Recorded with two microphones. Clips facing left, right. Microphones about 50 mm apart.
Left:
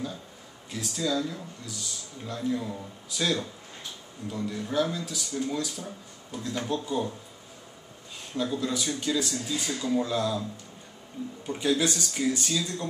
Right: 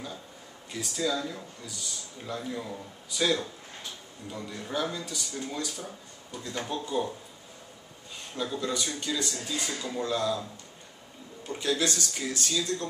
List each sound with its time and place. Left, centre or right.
0.7 s a man's voice: centre
8.4 s a man's voice: centre
11.4 s speech: centre